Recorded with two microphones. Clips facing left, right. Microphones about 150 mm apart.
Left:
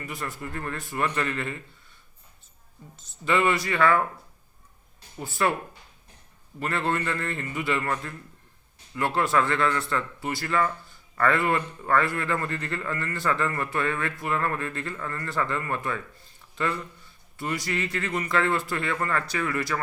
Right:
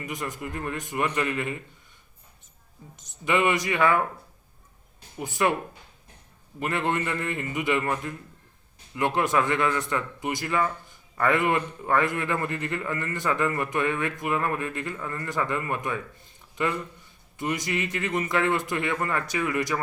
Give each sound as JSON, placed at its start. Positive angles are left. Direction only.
{"t": 0.0, "sound": "a man's voice", "side_deg": -15}
{"t": 2.9, "sound": "a man's voice", "side_deg": -20}
{"t": 5.1, "sound": "a man's voice", "side_deg": -15}
{"t": 6.6, "sound": "a man's voice", "side_deg": -15}